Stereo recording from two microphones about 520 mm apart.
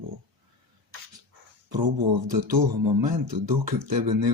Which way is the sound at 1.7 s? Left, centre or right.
Right.